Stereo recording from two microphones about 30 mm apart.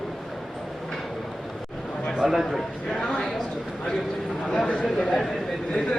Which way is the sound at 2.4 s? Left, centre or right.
Centre.